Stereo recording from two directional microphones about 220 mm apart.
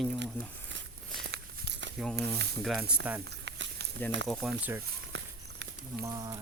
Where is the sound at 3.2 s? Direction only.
50° right (ahead or behind).